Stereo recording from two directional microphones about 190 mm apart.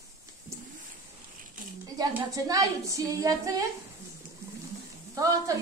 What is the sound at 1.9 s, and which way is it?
A woman's voice, 20° right (ahead or behind).